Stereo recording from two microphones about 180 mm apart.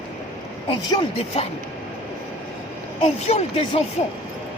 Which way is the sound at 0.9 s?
30° left (ahead or behind).